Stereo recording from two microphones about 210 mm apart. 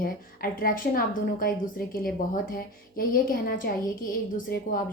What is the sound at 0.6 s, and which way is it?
A woman's voice, 40° left (ahead or behind).